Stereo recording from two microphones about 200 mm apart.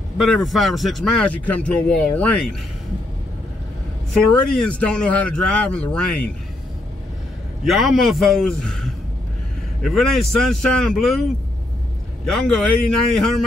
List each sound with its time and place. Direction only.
0.3 s speech: centre (ahead or behind)
4.2 s speech: 5° left (ahead or behind)
7.6 s speech: centre (ahead or behind)
12.3 s speech: 5° left (ahead or behind)